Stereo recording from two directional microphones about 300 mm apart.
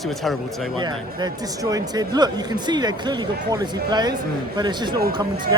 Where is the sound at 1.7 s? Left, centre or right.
Centre.